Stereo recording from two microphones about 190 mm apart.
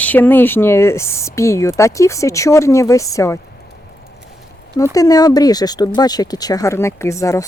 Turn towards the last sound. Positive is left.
turn(degrees=15)  # may be behind; listen again after turning